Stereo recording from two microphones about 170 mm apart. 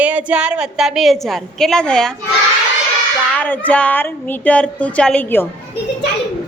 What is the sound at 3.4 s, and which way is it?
Speech, 10° left (ahead or behind).